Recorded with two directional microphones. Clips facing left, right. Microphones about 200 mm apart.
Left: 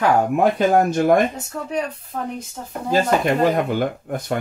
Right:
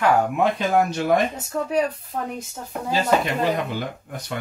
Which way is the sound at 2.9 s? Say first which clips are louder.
Left 3 dB; 50° left (ahead or behind).